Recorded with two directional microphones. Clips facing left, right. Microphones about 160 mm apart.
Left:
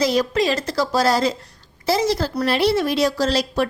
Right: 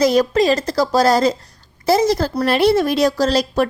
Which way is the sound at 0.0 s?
50° right (ahead or behind).